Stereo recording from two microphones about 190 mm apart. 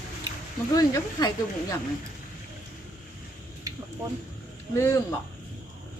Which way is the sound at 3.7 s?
20° right (ahead or behind).